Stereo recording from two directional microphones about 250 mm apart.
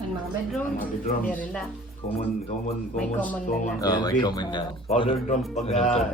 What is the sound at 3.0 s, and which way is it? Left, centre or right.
Speech, centre.